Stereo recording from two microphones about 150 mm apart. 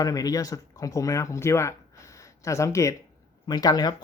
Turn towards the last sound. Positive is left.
turn(degrees=25)  # may be behind; listen again after turning